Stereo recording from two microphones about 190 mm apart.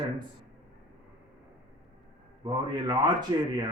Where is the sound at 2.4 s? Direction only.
25° right (ahead or behind).